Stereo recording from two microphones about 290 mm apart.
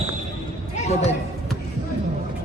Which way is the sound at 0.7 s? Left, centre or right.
Left.